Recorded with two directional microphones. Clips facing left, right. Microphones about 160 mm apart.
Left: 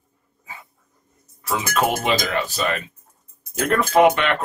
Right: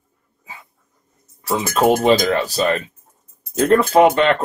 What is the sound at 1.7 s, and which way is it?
Speech, 35° right (ahead or behind).